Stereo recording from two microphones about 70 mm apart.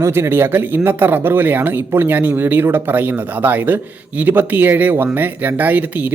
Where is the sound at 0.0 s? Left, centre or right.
Right.